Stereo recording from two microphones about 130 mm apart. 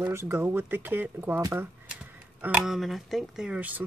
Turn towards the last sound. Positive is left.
turn(degrees=-10)  # may be behind; listen again after turning